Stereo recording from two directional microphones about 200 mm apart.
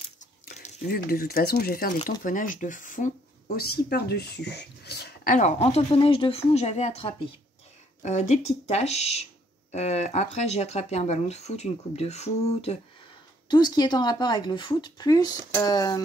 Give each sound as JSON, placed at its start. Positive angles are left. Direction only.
{"t": 0.8, "sound": "speech", "side_deg": 50}
{"t": 13.5, "sound": "speech", "side_deg": 20}